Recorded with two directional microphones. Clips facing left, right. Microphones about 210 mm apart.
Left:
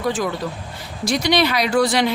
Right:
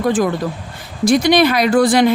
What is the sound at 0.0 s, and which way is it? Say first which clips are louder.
Speech: right 6 dB; 50° right (ahead or behind).